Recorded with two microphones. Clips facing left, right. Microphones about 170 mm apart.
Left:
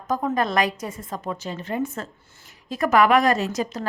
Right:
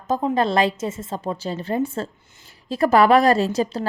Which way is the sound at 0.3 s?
30° right (ahead or behind).